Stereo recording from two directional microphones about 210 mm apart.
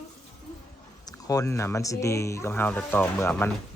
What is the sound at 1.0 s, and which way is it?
Speech, 15° left (ahead or behind).